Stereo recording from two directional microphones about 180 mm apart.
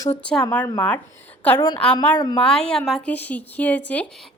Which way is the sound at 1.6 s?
25° left (ahead or behind).